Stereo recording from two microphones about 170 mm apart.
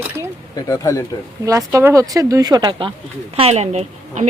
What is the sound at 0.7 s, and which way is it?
Speech, 20° left (ahead or behind).